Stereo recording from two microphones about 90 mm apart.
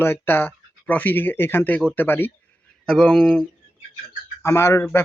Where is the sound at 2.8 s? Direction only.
5° left (ahead or behind).